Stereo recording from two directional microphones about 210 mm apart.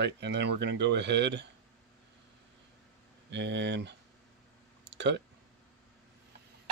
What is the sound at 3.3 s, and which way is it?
Speech, 55° right (ahead or behind).